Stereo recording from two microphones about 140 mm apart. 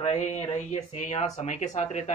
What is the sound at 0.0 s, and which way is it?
Speech, 55° left (ahead or behind).